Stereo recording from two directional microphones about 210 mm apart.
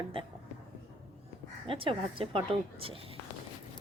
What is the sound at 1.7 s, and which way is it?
A woman's voice, 25° right (ahead or behind).